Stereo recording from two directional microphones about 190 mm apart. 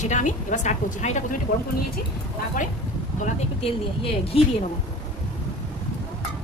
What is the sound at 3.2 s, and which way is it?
Speech, 30° left (ahead or behind).